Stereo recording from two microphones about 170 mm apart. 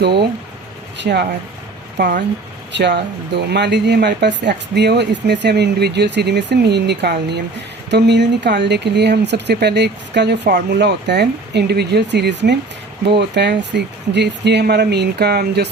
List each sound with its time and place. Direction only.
0.0 s speech: 75° right (ahead or behind)
2.7 s speech: 85° right